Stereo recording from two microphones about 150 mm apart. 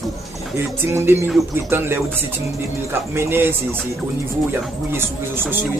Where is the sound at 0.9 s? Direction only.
15° right (ahead or behind).